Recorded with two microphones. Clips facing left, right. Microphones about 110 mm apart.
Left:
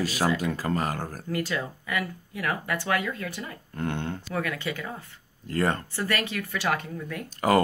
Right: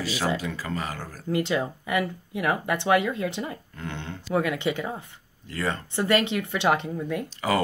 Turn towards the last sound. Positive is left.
turn(degrees=45)  # may be behind; listen again after turning